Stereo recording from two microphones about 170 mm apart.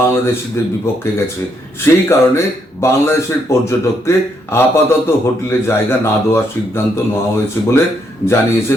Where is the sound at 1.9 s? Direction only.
15° left (ahead or behind).